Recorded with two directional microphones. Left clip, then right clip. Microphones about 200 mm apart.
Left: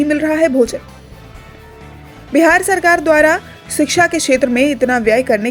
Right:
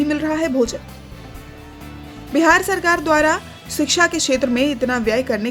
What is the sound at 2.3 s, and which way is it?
A woman's voice, 15° left (ahead or behind).